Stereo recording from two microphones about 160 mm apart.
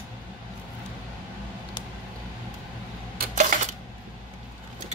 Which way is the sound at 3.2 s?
55° right (ahead or behind).